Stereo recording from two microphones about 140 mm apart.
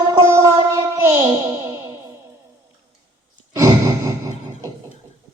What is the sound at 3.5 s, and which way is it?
Sigh, 25° right (ahead or behind).